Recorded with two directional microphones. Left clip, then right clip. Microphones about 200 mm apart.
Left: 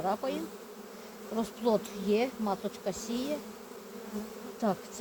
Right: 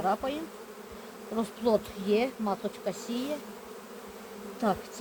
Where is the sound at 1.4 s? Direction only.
20° left (ahead or behind).